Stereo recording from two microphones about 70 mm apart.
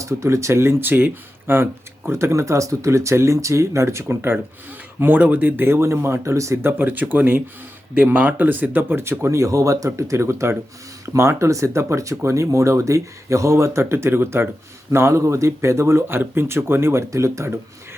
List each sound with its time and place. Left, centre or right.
0.0 s speech: right
2.0 s speech: right
6.6 s speech: right